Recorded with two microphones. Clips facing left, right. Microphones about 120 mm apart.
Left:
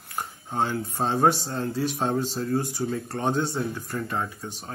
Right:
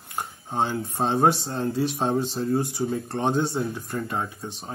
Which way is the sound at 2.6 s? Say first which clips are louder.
Right 2 dB; 15° right (ahead or behind).